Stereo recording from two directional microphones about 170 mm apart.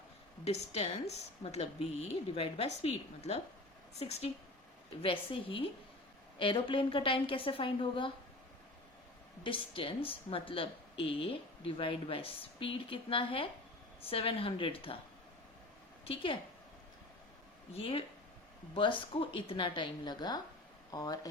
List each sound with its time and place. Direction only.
0.4 s a woman's voice: 40° left (ahead or behind)
9.4 s speech: 30° left (ahead or behind)
16.0 s speech: 30° left (ahead or behind)
17.7 s a woman's voice: 35° left (ahead or behind)